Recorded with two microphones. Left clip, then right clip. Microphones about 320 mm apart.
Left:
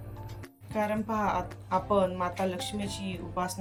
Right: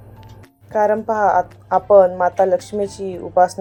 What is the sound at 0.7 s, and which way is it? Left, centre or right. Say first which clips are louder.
Speech: right 14 dB; centre.